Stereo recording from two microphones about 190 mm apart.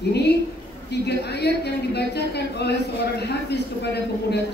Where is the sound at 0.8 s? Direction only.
60° left (ahead or behind).